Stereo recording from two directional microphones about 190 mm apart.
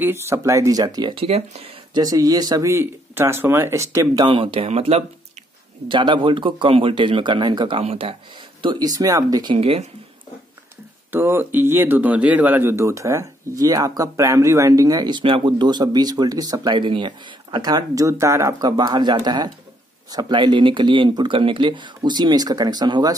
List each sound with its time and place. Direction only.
0.0 s speech: 15° right (ahead or behind); by 2.0 s 30° right (ahead or behind)
2.0 s speech: 20° right (ahead or behind)
8.6 s speech: 20° right (ahead or behind)
11.1 s speech: 10° right (ahead or behind)